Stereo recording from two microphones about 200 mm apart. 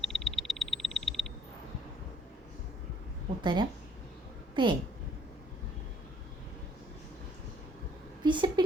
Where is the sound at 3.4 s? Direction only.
20° right (ahead or behind).